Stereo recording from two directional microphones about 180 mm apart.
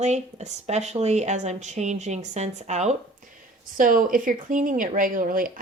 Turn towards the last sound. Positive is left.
turn(degrees=-50)  # may be behind; listen again after turning